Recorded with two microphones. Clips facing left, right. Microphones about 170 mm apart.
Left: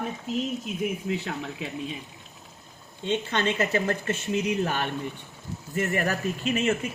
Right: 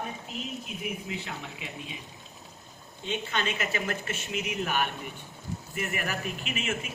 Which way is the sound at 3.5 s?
40° left (ahead or behind).